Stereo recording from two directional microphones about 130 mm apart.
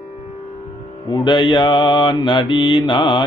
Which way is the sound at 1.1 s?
35° left (ahead or behind).